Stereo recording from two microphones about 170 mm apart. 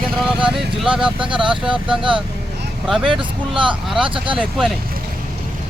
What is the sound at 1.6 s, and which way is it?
Speech, 5° right (ahead or behind).